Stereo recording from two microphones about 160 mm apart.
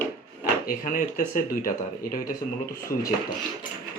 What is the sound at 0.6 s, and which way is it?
Speech, 65° left (ahead or behind).